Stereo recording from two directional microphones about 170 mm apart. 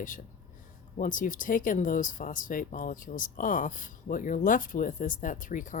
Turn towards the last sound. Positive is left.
turn(degrees=50)  # may be behind; listen again after turning